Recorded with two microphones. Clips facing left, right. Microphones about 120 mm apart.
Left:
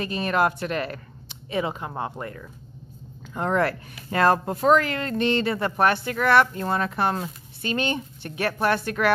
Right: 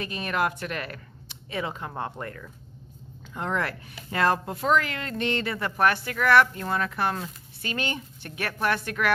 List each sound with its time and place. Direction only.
0.0 s speech: 35° left (ahead or behind); by 2.4 s 10° left (ahead or behind)
3.3 s speech: 40° left (ahead or behind)